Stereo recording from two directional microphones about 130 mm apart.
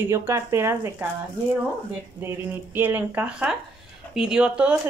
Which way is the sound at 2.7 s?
15° right (ahead or behind).